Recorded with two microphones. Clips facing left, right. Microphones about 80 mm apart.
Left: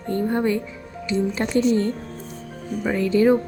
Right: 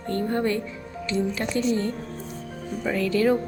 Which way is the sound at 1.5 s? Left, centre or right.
Left.